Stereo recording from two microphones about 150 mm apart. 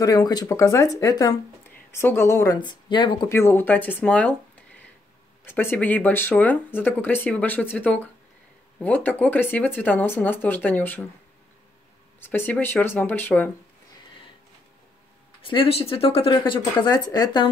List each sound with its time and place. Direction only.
0.0 s speech: 25° left (ahead or behind)
3.3 s speech: 15° left (ahead or behind)
5.4 s speech: 15° left (ahead or behind)
12.2 s speech: 10° left (ahead or behind)
15.4 s speech: 40° left (ahead or behind)